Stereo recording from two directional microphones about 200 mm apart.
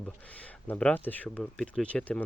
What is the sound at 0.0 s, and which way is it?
Speech, 5° left (ahead or behind).